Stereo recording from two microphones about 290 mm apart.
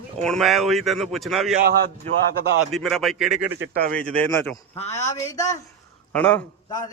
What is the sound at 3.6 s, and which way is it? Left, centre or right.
Speech, right.